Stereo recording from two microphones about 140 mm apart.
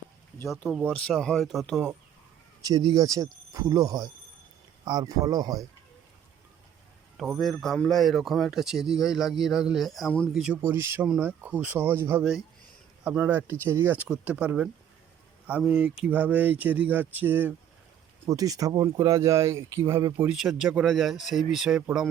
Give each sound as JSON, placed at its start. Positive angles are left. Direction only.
{"t": 0.4, "sound": "a man's voice", "side_deg": 0}
{"t": 2.6, "sound": "speech", "side_deg": -30}
{"t": 7.2, "sound": "a man's voice", "side_deg": 0}
{"t": 10.3, "sound": "a man's voice", "side_deg": -5}
{"t": 10.6, "sound": "speech", "side_deg": -20}
{"t": 18.3, "sound": "speech", "side_deg": -25}
{"t": 20.2, "sound": "a man's voice", "side_deg": 0}